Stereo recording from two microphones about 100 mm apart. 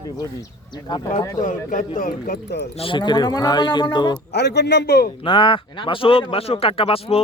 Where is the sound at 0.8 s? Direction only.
45° left (ahead or behind).